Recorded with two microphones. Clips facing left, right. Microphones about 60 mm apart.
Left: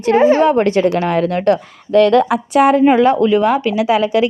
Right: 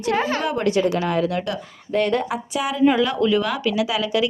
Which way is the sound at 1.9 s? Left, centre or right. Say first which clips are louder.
Left 10 dB; left.